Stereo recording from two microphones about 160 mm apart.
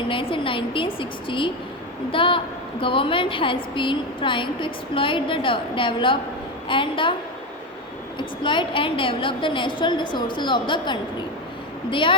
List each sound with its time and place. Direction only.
0.1 s a woman's voice: 35° left (ahead or behind)
8.2 s a woman's voice: 30° left (ahead or behind)